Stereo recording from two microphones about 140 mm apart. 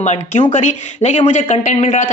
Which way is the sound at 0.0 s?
55° left (ahead or behind).